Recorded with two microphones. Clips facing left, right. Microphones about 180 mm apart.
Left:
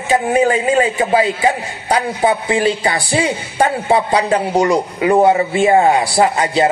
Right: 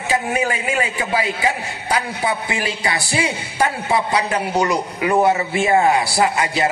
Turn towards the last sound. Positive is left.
turn(degrees=30)  # may be behind; listen again after turning